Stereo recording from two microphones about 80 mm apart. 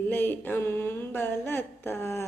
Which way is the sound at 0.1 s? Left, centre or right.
Left.